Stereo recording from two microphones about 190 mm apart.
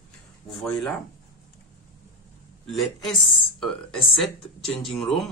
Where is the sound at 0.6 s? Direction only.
Centre (ahead or behind).